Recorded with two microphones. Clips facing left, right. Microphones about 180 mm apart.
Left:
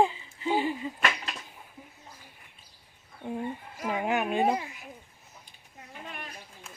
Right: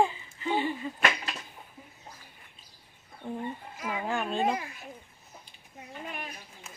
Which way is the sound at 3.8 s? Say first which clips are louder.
Left 3 dB; 20° left (ahead or behind).